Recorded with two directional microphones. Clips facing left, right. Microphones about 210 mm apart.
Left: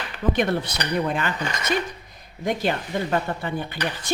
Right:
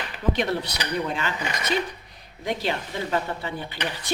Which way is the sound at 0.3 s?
50° left (ahead or behind).